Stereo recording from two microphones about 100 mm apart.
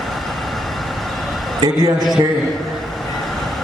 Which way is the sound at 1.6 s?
40° right (ahead or behind).